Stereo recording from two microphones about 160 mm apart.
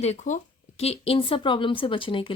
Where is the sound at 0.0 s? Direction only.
45° left (ahead or behind).